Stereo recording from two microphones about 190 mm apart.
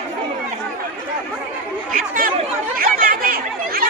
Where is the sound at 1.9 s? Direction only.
45° right (ahead or behind).